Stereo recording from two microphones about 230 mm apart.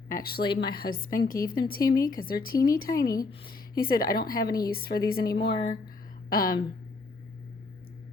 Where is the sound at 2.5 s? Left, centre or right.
Centre.